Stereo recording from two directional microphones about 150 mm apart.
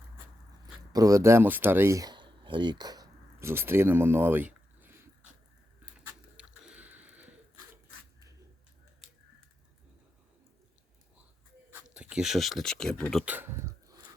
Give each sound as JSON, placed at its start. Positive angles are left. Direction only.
{"t": 0.9, "sound": "speech", "side_deg": -20}
{"t": 6.3, "sound": "a sound", "side_deg": -5}
{"t": 11.7, "sound": "speech", "side_deg": -10}
{"t": 13.2, "sound": "speech", "side_deg": -15}